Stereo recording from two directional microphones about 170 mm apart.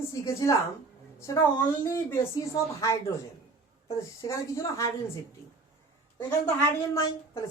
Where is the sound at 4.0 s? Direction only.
20° left (ahead or behind).